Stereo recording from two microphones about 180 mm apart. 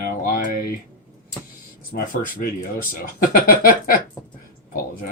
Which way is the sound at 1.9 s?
55° left (ahead or behind).